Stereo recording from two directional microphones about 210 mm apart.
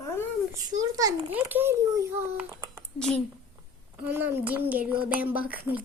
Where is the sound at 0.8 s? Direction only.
15° right (ahead or behind).